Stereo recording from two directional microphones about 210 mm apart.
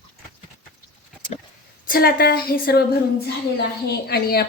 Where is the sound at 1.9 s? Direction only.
45° left (ahead or behind).